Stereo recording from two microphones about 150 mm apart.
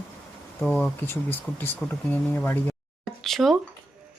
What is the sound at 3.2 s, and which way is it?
Speech, centre (ahead or behind).